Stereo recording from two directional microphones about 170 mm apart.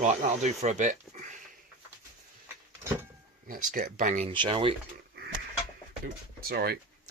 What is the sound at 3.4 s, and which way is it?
Speech, 55° right (ahead or behind).